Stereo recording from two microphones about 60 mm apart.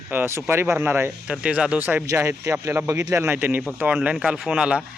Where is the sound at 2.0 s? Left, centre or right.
Right.